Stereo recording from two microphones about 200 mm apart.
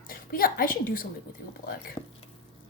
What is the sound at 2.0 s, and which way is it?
Frying, 20° left (ahead or behind).